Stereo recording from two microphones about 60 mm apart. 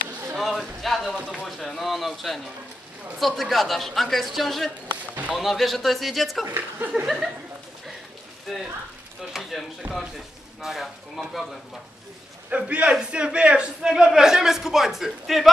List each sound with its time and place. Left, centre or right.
0.3 s a sound: centre
1.4 s a man's voice: centre
8.5 s a man's voice: centre
12.4 s a man's voice: right; by 15.5 s centre